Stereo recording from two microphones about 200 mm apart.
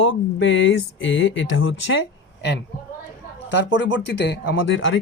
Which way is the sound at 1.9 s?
65° left (ahead or behind).